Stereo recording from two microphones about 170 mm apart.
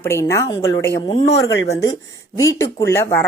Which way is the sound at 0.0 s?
15° left (ahead or behind).